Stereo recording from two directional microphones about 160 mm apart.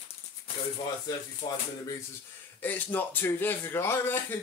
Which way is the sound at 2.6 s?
10° left (ahead or behind).